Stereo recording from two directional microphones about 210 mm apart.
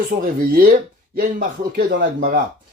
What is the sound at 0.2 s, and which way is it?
Speech, 40° right (ahead or behind).